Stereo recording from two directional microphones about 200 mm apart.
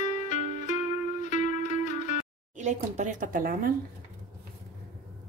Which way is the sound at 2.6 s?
35° right (ahead or behind).